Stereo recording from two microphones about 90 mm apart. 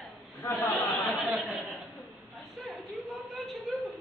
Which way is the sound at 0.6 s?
20° left (ahead or behind).